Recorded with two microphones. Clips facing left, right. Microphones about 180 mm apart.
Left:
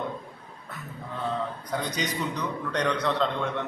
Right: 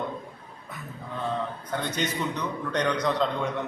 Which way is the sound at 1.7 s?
5° left (ahead or behind).